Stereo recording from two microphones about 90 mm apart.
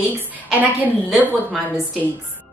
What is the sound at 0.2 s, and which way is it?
A woman's voice, 20° right (ahead or behind).